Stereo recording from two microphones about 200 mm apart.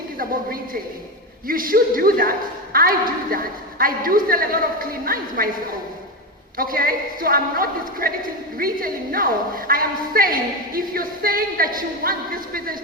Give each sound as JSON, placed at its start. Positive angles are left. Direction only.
{"t": 0.2, "sound": "a woman's voice", "side_deg": -45}
{"t": 6.6, "sound": "a woman's voice", "side_deg": -45}